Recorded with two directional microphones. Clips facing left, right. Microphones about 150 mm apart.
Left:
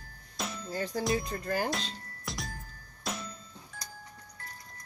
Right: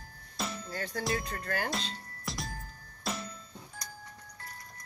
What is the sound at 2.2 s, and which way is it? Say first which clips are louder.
Music: right 1 dB; centre (ahead or behind).